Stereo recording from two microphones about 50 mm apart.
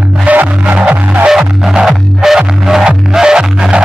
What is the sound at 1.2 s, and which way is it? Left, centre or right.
Music, centre.